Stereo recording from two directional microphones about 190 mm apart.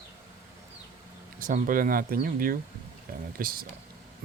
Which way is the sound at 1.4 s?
45° right (ahead or behind).